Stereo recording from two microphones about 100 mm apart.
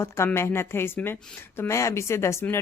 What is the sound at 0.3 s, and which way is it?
A woman's voice, 25° left (ahead or behind).